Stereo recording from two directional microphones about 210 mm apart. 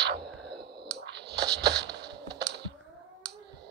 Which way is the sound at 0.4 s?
55° right (ahead or behind).